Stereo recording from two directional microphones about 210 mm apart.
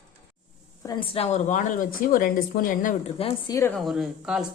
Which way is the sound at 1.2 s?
30° left (ahead or behind).